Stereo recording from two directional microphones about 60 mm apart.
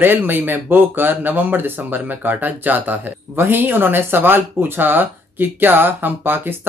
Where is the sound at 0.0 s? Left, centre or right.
Right.